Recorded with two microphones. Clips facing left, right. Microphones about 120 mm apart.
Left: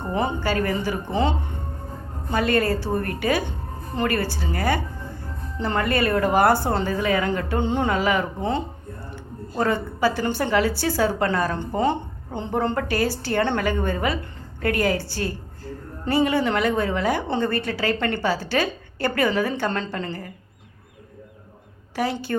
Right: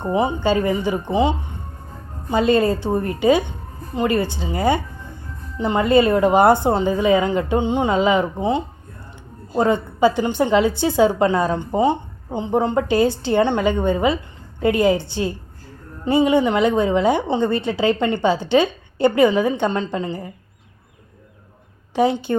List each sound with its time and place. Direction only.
0.0 s a woman's voice: 15° right (ahead or behind)
21.9 s a woman's voice: 20° right (ahead or behind)